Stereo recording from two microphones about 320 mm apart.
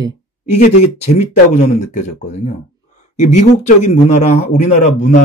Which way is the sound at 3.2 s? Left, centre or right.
Left.